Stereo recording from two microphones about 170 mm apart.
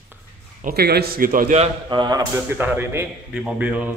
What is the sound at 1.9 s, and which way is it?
Speech, 25° right (ahead or behind).